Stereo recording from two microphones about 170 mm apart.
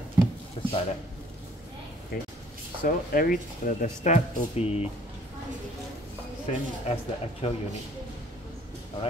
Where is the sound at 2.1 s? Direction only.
60° left (ahead or behind); by 4.8 s 40° left (ahead or behind).